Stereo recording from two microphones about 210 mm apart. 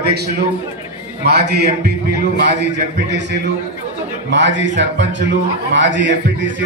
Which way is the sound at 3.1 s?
55° right (ahead or behind).